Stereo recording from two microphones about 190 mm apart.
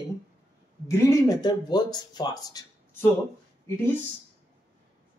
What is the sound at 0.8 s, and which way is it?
Speech, 15° left (ahead or behind).